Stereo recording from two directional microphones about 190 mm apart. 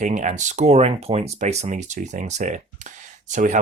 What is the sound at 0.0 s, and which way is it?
Speech, 40° right (ahead or behind).